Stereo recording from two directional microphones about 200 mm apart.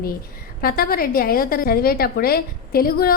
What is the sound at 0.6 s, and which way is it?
A woman's voice, 45° left (ahead or behind).